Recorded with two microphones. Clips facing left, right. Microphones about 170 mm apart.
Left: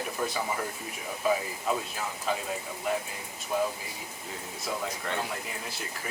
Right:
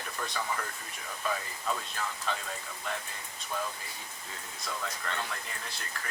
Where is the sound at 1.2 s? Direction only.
15° left (ahead or behind).